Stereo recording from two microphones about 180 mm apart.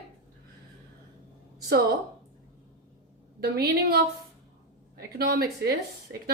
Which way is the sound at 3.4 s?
60° right (ahead or behind).